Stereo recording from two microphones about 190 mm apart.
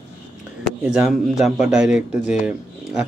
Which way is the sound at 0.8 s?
5° right (ahead or behind).